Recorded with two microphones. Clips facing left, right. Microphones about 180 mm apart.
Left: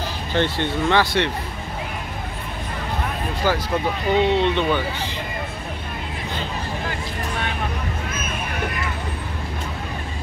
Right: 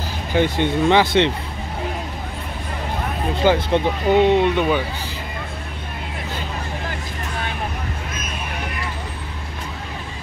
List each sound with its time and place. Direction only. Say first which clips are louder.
0.3 s speech: right 4 dB; 15° right (ahead or behind)
3.4 s speech: right 5 dB; 25° right (ahead or behind)
4.1 s speech: right 4 dB; 15° right (ahead or behind)